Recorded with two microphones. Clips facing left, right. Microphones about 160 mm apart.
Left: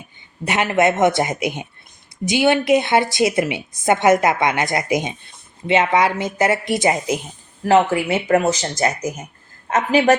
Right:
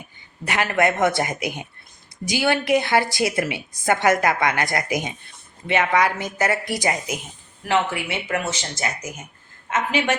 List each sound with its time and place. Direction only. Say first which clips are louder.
0.4 s a woman's voice: left 4 dB; 20° left (ahead or behind)
7.6 s speech: left 7 dB; 40° left (ahead or behind)